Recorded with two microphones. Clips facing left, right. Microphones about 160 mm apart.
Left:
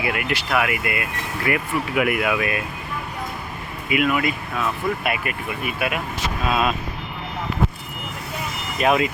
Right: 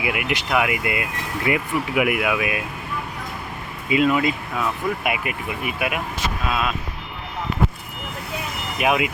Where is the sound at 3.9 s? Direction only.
25° right (ahead or behind).